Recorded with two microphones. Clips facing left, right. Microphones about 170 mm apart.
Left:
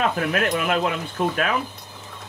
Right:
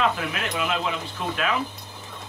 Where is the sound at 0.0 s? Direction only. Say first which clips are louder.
Left 4 dB; 50° left (ahead or behind).